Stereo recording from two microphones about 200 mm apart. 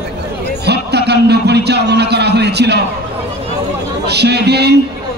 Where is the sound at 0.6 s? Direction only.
55° right (ahead or behind).